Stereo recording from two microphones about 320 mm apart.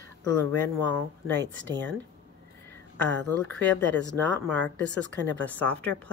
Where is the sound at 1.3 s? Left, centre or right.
Right.